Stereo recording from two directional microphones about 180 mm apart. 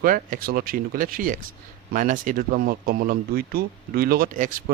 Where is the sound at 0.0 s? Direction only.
55° right (ahead or behind).